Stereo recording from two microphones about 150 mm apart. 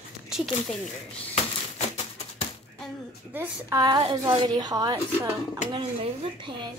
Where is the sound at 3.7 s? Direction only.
30° right (ahead or behind).